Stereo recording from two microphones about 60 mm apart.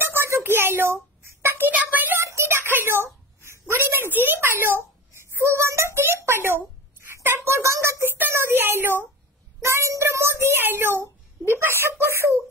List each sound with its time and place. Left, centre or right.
0.0 s a sound: right
1.7 s a child's voice: right
2.2 s a sound: right
7.2 s a child's voice: right
7.8 s child singing: right
9.6 s a child's voice: right